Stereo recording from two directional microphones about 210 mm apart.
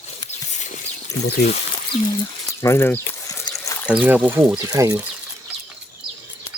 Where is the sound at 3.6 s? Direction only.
15° left (ahead or behind).